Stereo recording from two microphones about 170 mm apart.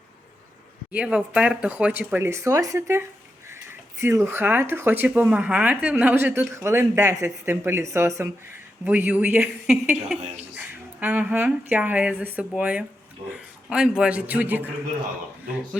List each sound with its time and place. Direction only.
0.9 s speech: 5° right (ahead or behind)
4.0 s speech: 15° right (ahead or behind)